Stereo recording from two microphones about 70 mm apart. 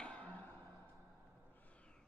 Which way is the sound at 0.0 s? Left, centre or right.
Centre.